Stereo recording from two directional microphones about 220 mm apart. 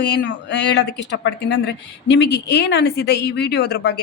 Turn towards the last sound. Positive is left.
turn(degrees=50)  # may be behind; listen again after turning